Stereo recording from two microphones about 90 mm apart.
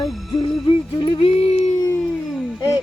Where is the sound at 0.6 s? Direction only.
65° left (ahead or behind).